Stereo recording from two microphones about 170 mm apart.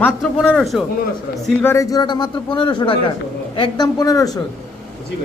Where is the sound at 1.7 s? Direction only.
20° left (ahead or behind).